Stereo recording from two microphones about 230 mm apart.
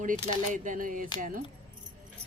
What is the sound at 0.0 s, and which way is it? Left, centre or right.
A woman's voice, right.